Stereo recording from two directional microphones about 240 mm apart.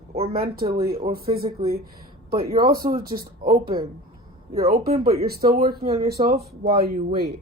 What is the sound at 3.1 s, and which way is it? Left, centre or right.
Speech, right.